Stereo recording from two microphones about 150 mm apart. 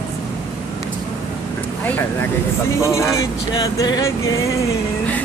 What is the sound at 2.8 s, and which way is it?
Speech, 20° left (ahead or behind).